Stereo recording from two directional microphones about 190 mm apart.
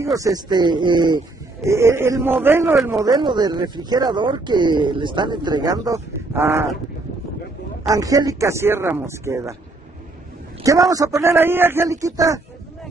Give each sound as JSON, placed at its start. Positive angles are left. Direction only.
{"t": 0.0, "sound": "speech", "side_deg": -15}
{"t": 7.9, "sound": "speech", "side_deg": -20}
{"t": 10.6, "sound": "speech", "side_deg": -15}